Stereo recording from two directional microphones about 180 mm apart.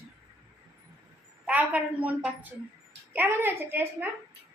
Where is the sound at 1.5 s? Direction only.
10° right (ahead or behind).